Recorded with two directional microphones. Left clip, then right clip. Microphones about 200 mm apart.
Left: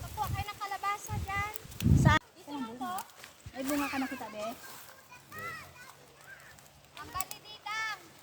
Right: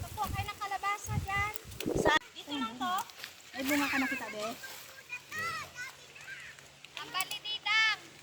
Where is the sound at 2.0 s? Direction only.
10° left (ahead or behind).